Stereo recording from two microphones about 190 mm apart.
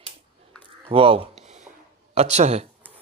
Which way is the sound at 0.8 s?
30° right (ahead or behind).